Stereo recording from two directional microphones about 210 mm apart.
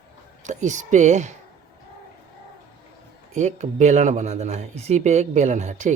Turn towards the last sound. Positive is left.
turn(degrees=-35)  # may be behind; listen again after turning